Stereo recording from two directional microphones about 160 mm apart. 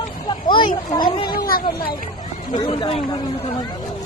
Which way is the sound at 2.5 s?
30° left (ahead or behind).